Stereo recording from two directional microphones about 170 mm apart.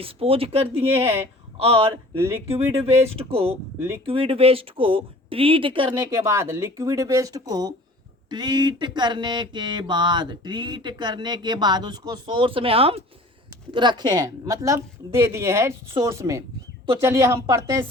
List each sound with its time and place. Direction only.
0.0 s speech: 35° right (ahead or behind)
0.9 s a woman's voice: 15° right (ahead or behind)
1.5 s speech: 35° right (ahead or behind)
2.1 s a woman's voice: 15° right (ahead or behind)
3.1 s speech: 35° right (ahead or behind)
3.8 s a woman's voice: 15° right (ahead or behind)
4.0 s speech: 30° right (ahead or behind)
6.0 s a woman's voice: 15° right (ahead or behind)
8.3 s a sound: 25° right (ahead or behind)
13.7 s a woman's voice: 30° right (ahead or behind)